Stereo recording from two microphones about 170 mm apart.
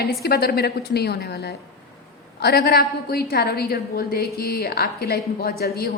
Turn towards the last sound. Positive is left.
turn(degrees=65)  # may be behind; listen again after turning